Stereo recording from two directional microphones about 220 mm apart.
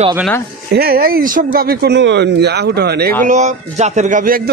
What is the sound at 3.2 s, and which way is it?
Speech, 30° right (ahead or behind).